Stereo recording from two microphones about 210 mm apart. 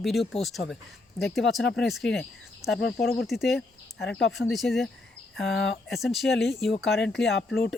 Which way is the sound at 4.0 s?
55° left (ahead or behind).